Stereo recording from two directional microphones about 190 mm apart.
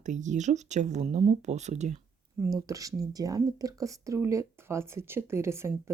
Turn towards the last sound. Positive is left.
turn(degrees=-15)  # may be behind; listen again after turning